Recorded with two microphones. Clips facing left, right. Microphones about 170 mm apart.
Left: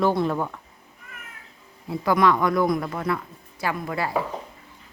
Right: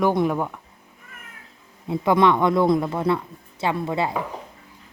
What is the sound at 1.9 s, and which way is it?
Speech, 20° right (ahead or behind).